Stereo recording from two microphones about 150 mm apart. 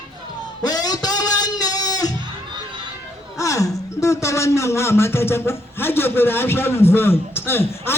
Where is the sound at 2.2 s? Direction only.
30° right (ahead or behind).